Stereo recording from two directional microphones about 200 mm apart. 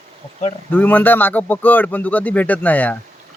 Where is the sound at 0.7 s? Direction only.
10° left (ahead or behind).